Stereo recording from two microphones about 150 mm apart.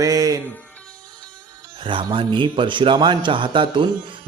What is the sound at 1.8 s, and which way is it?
A man's voice, 35° right (ahead or behind).